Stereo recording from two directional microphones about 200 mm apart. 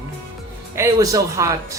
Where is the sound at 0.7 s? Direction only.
15° right (ahead or behind).